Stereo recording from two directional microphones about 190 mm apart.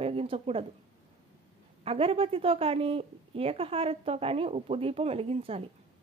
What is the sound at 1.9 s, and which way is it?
A woman's voice, 30° right (ahead or behind).